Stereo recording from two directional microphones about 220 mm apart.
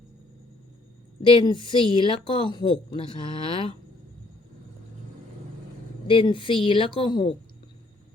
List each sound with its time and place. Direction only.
1.3 s a woman's voice: 20° left (ahead or behind)
6.1 s a woman's voice: 25° left (ahead or behind)